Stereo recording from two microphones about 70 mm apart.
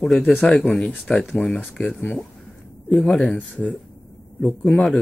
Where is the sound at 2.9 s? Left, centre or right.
Centre.